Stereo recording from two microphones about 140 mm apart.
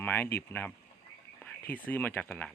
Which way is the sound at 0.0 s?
15° left (ahead or behind).